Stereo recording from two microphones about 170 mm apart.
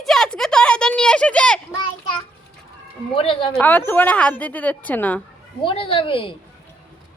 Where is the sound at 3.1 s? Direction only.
30° left (ahead or behind).